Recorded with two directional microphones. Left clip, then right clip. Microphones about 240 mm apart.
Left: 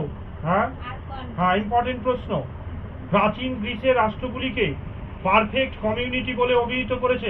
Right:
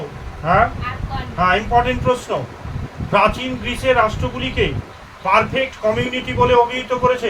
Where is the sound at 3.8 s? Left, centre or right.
Right.